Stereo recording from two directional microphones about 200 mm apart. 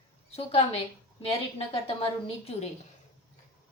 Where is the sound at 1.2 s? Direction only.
30° left (ahead or behind).